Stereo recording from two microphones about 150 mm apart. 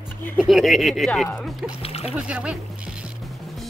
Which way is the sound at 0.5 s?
Centre (ahead or behind).